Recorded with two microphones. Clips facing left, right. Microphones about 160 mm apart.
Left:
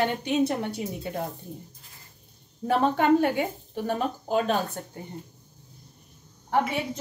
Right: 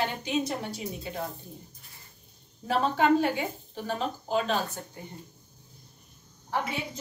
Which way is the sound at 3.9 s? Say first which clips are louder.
Left 3 dB; 50° left (ahead or behind).